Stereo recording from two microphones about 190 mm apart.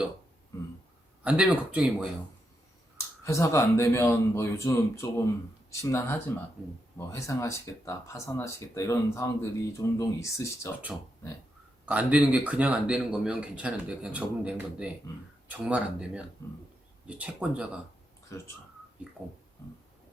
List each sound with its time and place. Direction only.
1.2 s speech: 5° right (ahead or behind)
3.2 s speech: 15° left (ahead or behind)
11.9 s speech: 10° right (ahead or behind)
18.3 s speech: 15° left (ahead or behind)